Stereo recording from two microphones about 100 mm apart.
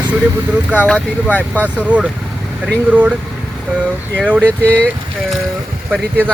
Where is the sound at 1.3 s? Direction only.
15° left (ahead or behind).